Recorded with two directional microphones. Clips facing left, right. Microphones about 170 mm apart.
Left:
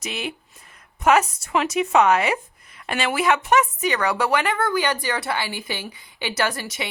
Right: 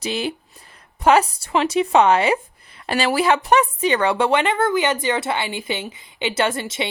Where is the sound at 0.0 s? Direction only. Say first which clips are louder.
Right 6 dB; 30° right (ahead or behind).